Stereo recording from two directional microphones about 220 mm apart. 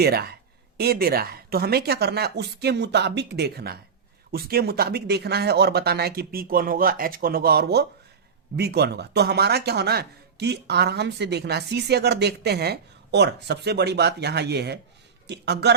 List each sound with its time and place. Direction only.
0.0 s speech: 45° right (ahead or behind)